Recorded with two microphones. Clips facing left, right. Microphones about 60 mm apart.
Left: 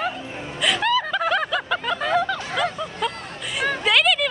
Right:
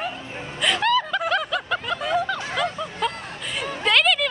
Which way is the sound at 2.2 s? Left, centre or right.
Centre.